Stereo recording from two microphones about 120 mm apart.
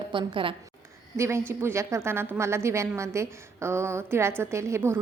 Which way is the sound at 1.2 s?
20° right (ahead or behind).